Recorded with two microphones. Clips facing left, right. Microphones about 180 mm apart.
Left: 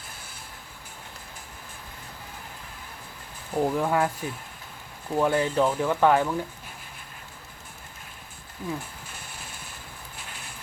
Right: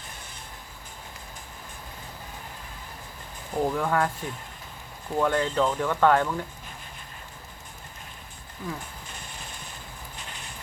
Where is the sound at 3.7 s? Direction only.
20° left (ahead or behind).